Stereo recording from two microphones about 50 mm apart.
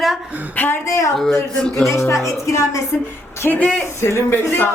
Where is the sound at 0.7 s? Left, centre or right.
Left.